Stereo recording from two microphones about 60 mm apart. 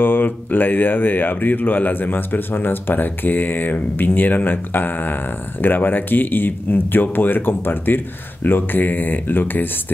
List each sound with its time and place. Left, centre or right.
0.0 s speech: left